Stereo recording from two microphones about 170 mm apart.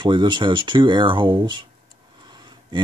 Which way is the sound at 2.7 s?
25° right (ahead or behind).